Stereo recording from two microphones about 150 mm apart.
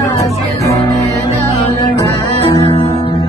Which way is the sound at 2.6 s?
40° left (ahead or behind).